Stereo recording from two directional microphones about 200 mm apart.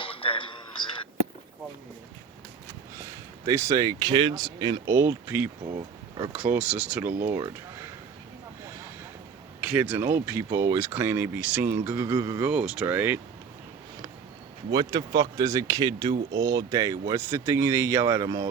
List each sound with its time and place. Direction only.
0.0 s a sound: 25° left (ahead or behind)
2.9 s a man's voice: 15° right (ahead or behind)
5.7 s a sound: 25° right (ahead or behind)
6.3 s speech: 5° right (ahead or behind)
7.1 s speech: 45° right (ahead or behind)
7.3 s speech: 20° right (ahead or behind)
9.6 s speech: 5° right (ahead or behind)
12.5 s speech: 5° right (ahead or behind)
14.7 s speech: 20° right (ahead or behind)